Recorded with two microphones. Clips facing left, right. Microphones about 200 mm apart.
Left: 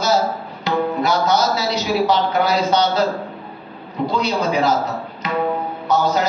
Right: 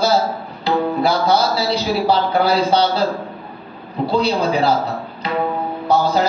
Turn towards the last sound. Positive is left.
turn(degrees=-30)  # may be behind; listen again after turning